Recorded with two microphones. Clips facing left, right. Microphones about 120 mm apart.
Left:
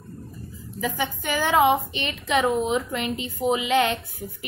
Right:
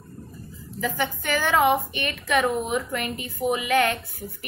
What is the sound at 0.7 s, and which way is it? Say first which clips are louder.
A woman's voice: even; 15° left (ahead or behind).